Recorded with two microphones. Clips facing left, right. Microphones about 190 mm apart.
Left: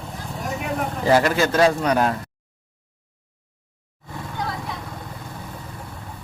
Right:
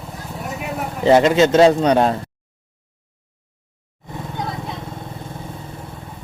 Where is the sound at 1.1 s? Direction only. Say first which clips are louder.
Right 6 dB; 20° right (ahead or behind).